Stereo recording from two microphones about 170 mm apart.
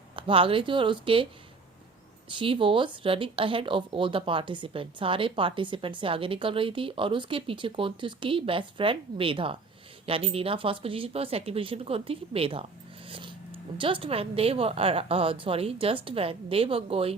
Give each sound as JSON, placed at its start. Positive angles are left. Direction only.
{"t": 0.2, "sound": "speech", "side_deg": -30}
{"t": 2.3, "sound": "speech", "side_deg": -30}
{"t": 13.1, "sound": "a sound", "side_deg": -30}
{"t": 13.7, "sound": "speech", "side_deg": -30}